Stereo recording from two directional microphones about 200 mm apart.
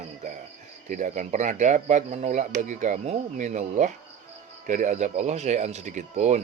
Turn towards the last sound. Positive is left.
turn(degrees=-35)  # may be behind; listen again after turning